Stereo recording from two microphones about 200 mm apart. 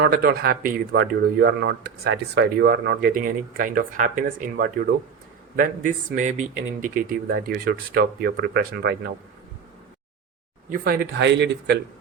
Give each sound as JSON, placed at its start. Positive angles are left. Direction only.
{"t": 0.0, "sound": "a man's voice", "side_deg": -50}
{"t": 10.7, "sound": "speech", "side_deg": -50}